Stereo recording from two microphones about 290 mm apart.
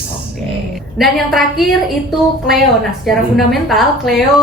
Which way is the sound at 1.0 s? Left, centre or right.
Centre.